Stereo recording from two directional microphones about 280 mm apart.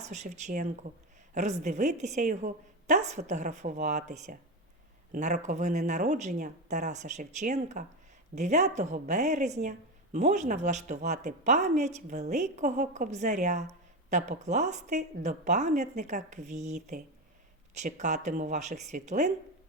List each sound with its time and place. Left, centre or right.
0.0 s speech: right
17.7 s speech: right